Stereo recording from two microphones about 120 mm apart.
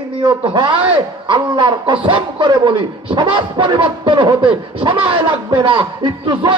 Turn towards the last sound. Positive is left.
turn(degrees=-40)  # may be behind; listen again after turning